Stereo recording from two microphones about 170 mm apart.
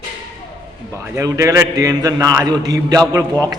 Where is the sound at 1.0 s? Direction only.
15° right (ahead or behind).